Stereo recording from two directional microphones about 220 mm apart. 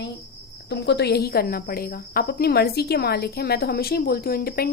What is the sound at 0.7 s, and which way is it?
Speech, 50° left (ahead or behind).